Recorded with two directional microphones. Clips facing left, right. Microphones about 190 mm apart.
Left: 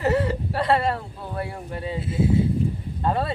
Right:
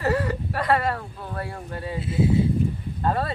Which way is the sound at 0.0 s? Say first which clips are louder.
Left 2 dB; 25° left (ahead or behind).